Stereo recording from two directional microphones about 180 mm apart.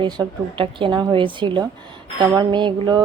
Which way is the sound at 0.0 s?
25° right (ahead or behind).